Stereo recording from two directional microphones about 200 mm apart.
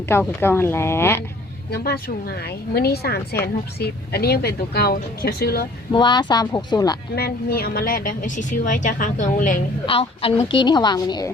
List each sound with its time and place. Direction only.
0.1 s speech: 10° left (ahead or behind)
1.7 s speech: 50° left (ahead or behind)
5.9 s a woman's voice: 20° left (ahead or behind)
7.2 s a woman's voice: 50° left (ahead or behind)
9.8 s a woman's voice: 30° left (ahead or behind)